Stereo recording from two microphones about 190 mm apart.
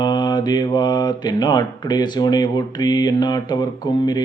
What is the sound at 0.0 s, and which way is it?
Mantra, 25° left (ahead or behind).